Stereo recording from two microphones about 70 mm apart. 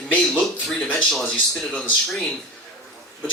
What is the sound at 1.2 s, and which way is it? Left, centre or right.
Speech, centre.